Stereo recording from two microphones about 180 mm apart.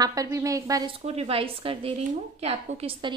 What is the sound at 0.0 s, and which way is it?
Speech, 20° right (ahead or behind).